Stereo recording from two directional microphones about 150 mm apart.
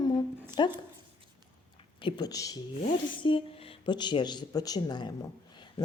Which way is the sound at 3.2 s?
35° left (ahead or behind).